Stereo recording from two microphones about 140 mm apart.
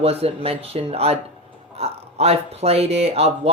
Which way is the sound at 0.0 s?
45° right (ahead or behind).